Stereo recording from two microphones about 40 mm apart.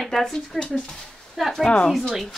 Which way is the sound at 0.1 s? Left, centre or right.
Centre.